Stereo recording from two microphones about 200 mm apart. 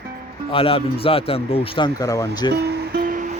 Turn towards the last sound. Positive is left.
turn(degrees=-50)  # may be behind; listen again after turning